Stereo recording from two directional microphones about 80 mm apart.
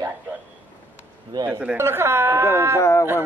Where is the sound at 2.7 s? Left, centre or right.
Left.